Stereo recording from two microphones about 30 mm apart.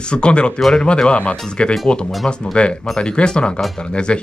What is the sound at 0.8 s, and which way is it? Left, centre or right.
Speech, left.